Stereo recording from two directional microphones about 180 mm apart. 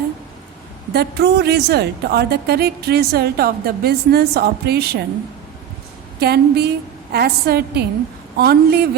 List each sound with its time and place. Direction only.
0.9 s a woman's voice: 65° right (ahead or behind)
6.1 s a woman's voice: 65° right (ahead or behind)